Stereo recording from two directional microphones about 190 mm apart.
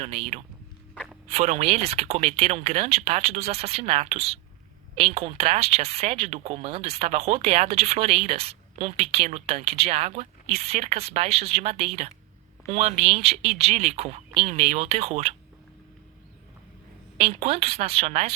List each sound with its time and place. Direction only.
0.0 s speech: 35° right (ahead or behind)
17.2 s speech: 30° right (ahead or behind)